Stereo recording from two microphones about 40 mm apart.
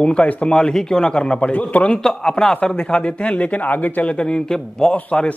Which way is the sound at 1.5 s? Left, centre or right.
Left.